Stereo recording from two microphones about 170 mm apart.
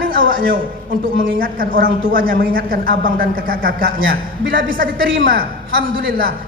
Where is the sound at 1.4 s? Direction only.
55° right (ahead or behind).